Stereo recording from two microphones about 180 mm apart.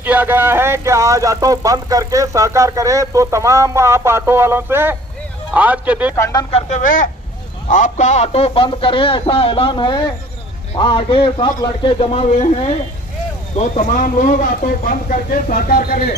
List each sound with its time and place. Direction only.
0.0 s speech: 10° right (ahead or behind)
6.1 s speech: 15° left (ahead or behind)
6.5 s a man's voice: 35° left (ahead or behind)
13.6 s speech: 45° left (ahead or behind)